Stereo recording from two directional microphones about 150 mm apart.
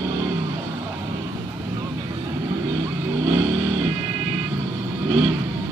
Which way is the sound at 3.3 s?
20° right (ahead or behind).